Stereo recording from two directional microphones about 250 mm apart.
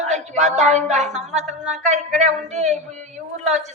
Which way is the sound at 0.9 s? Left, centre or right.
Right.